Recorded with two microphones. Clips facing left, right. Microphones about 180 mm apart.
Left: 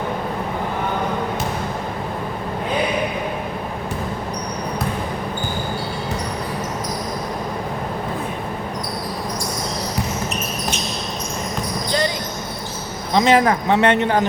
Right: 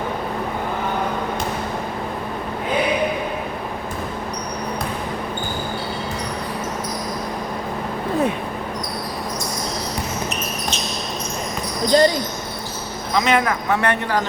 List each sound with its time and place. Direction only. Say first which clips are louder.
11.9 s basketball bounce: right 7 dB; 35° right (ahead or behind)
13.1 s speech: left 4 dB; 30° left (ahead or behind)